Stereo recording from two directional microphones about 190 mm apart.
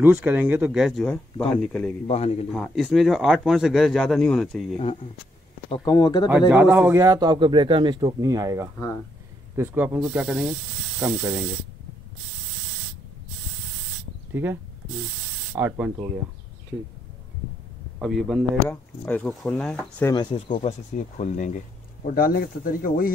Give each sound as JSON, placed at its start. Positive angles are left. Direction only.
{"t": 0.0, "sound": "speech", "side_deg": -10}
{"t": 1.0, "sound": "speech", "side_deg": 5}
{"t": 2.0, "sound": "speech", "side_deg": 30}
{"t": 2.5, "sound": "speech", "side_deg": 0}
{"t": 5.7, "sound": "speech", "side_deg": 20}
{"t": 6.5, "sound": "speech", "side_deg": -10}
{"t": 8.7, "sound": "speech", "side_deg": 15}
{"t": 9.6, "sound": "speech", "side_deg": -10}
{"t": 14.3, "sound": "speech", "side_deg": -10}
{"t": 17.9, "sound": "speech", "side_deg": 0}
{"t": 20.1, "sound": "speech", "side_deg": 25}